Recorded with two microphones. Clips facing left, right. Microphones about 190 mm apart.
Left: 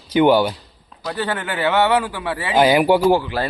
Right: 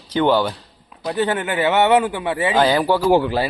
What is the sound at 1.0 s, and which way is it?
Speech, 20° right (ahead or behind).